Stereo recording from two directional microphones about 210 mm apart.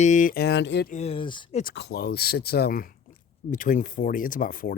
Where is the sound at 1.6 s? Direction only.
55° left (ahead or behind).